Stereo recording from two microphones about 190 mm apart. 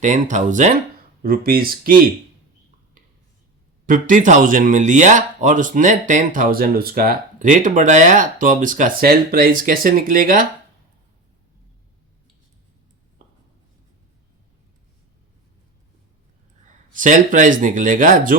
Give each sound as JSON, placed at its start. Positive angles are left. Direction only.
{"t": 0.0, "sound": "speech", "side_deg": -40}
{"t": 1.2, "sound": "speech", "side_deg": -50}
{"t": 3.8, "sound": "speech", "side_deg": -45}
{"t": 16.9, "sound": "speech", "side_deg": -45}